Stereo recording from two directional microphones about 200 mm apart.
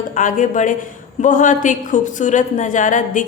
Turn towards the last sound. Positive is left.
turn(degrees=40)  # may be behind; listen again after turning